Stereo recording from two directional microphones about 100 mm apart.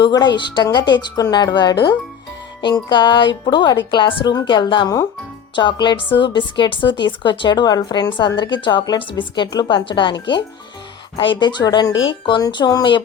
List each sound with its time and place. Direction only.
0.0 s a woman's voice: 45° left (ahead or behind)